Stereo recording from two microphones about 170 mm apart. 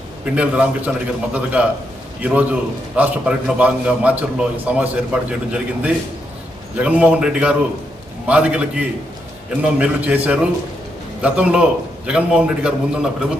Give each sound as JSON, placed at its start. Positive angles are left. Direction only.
{"t": 0.3, "sound": "a man's voice", "side_deg": -5}